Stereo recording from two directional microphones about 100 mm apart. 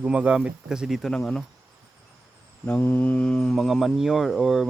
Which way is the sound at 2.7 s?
20° left (ahead or behind).